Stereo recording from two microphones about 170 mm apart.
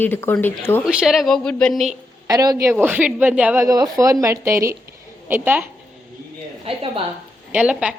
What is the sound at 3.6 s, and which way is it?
A woman's voice, 20° right (ahead or behind).